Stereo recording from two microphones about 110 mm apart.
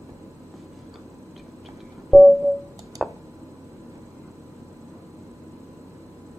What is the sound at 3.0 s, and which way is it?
Tick, centre (ahead or behind).